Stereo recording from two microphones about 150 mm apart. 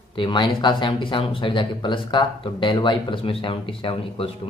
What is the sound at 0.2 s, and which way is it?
Speech, 30° left (ahead or behind).